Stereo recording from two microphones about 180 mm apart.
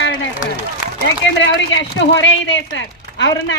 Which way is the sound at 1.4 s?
85° left.